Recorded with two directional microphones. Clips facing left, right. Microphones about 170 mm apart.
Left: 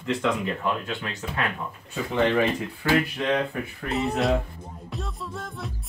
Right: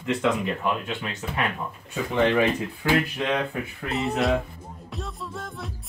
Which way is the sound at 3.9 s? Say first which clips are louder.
Even; centre (ahead or behind).